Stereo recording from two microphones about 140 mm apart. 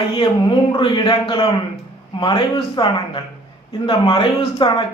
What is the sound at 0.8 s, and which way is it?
A man's voice, 30° left (ahead or behind).